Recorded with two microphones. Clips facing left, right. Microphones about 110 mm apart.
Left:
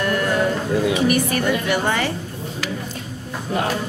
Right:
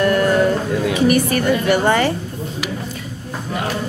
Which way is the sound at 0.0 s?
45° right (ahead or behind).